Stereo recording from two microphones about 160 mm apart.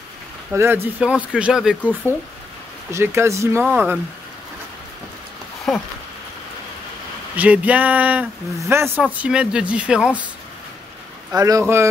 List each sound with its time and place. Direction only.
0.5 s speech: 15° right (ahead or behind)
2.9 s speech: 15° right (ahead or behind)
5.7 s speech: centre (ahead or behind)
7.3 s speech: 10° right (ahead or behind)
11.3 s speech: 20° right (ahead or behind)